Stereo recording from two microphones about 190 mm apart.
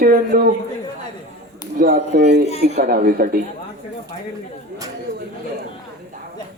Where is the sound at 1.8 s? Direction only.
50° right (ahead or behind).